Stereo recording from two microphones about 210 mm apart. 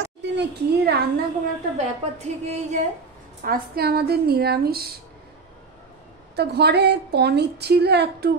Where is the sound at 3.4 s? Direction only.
45° right (ahead or behind).